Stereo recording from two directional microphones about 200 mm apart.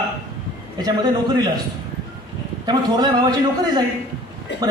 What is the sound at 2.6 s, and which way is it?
A man's voice, 20° right (ahead or behind).